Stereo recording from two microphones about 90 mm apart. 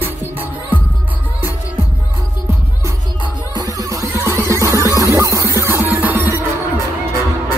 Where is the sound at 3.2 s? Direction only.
45° right (ahead or behind); by 6.3 s 20° right (ahead or behind).